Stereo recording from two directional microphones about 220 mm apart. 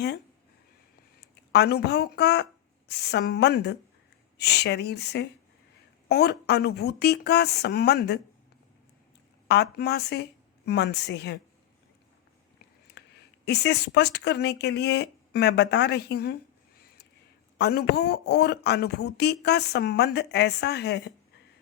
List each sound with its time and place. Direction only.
1.5 s speech: 50° left (ahead or behind)
9.5 s speech: 50° left (ahead or behind)
13.0 s a sound: 50° left (ahead or behind)
13.4 s speech: 50° left (ahead or behind)